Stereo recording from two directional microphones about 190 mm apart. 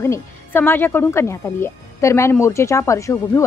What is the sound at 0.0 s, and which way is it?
Speech, 10° left (ahead or behind).